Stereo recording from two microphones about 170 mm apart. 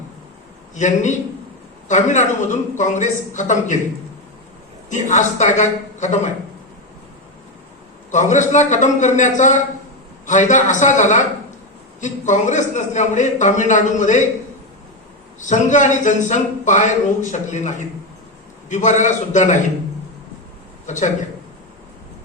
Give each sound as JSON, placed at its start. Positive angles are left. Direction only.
{"t": 0.8, "sound": "speech", "side_deg": 45}
{"t": 4.9, "sound": "speech", "side_deg": 45}
{"t": 8.1, "sound": "speech", "side_deg": 45}
{"t": 15.4, "sound": "speech", "side_deg": 45}
{"t": 20.8, "sound": "speech", "side_deg": 45}